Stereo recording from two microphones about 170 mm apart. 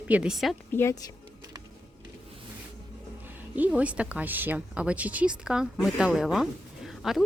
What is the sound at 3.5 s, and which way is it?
Speech, 10° right (ahead or behind).